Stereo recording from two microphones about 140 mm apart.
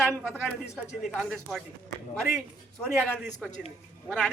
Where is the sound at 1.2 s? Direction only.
Centre (ahead or behind).